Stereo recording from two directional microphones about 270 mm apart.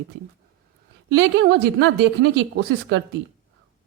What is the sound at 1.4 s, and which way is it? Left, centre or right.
A woman's voice, right.